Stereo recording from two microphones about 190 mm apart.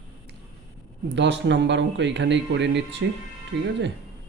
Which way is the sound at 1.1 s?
70° right (ahead or behind).